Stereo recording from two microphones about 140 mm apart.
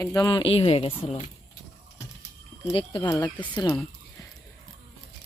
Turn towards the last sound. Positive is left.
turn(degrees=30)  # may be behind; listen again after turning